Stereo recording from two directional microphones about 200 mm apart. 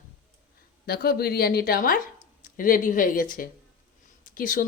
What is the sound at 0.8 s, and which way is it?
Speech, 50° left (ahead or behind).